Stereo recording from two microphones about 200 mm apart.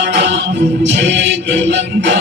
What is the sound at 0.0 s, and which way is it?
Music, 60° right (ahead or behind).